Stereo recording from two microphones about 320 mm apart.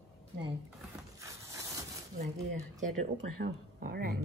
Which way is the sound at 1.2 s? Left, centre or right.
Centre.